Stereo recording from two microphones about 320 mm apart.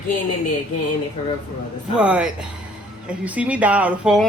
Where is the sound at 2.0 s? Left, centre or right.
Centre.